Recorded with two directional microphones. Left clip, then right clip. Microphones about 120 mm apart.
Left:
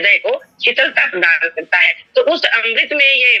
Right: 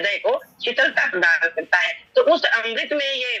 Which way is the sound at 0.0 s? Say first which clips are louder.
Left 7 dB; 30° left (ahead or behind).